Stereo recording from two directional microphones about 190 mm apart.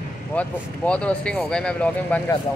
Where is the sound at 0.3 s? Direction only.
5° left (ahead or behind).